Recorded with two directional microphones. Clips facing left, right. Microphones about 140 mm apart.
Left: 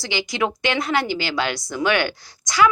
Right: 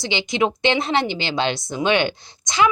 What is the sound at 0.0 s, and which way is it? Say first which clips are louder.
A woman's voice: right 3 dB; 20° right (ahead or behind).